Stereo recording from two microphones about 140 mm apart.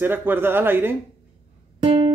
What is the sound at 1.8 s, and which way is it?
Music, 35° right (ahead or behind).